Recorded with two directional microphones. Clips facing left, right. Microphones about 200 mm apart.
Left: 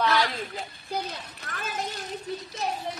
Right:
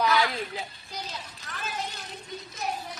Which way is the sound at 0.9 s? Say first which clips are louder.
Left 6 dB; 60° left (ahead or behind).